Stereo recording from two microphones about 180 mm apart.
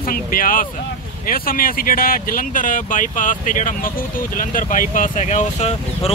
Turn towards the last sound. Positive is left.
turn(degrees=40)  # may be behind; listen again after turning